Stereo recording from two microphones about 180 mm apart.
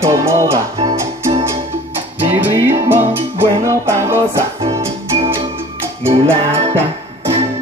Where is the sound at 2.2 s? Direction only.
10° right (ahead or behind).